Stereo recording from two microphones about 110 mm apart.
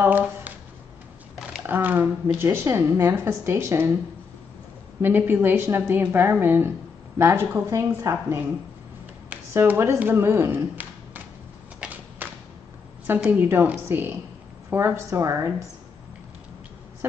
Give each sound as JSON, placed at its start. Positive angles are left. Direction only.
{"t": 0.0, "sound": "speech", "side_deg": -15}
{"t": 1.7, "sound": "a woman's voice", "side_deg": -15}
{"t": 5.0, "sound": "a woman's voice", "side_deg": -20}
{"t": 9.5, "sound": "speech", "side_deg": -25}
{"t": 11.8, "sound": "a sound", "side_deg": -15}
{"t": 13.4, "sound": "a woman's voice", "side_deg": -20}